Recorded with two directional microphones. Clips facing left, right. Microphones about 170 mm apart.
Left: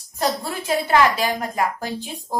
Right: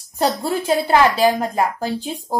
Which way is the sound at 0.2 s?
30° right (ahead or behind).